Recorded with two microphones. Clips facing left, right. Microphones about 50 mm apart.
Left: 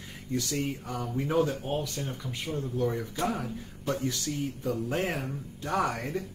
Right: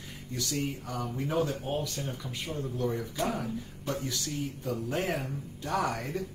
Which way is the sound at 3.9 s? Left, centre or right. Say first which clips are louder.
Left 3 dB; left.